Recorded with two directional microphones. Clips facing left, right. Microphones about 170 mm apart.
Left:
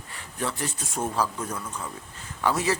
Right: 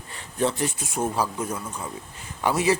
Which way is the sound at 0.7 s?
10° right (ahead or behind).